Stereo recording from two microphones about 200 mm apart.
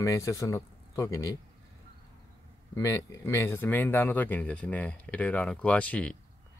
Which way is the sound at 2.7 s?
15° left (ahead or behind).